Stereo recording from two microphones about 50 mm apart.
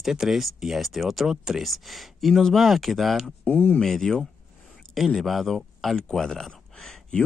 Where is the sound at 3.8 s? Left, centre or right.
Centre.